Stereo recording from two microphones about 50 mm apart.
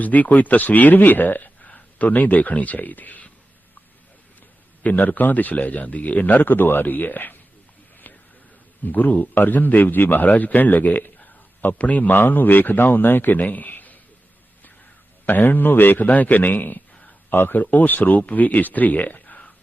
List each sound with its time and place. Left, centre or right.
0.0 s a man's voice: left
4.8 s a man's voice: left
8.1 s a sound: left
8.8 s a man's voice: left
15.3 s a man's voice: left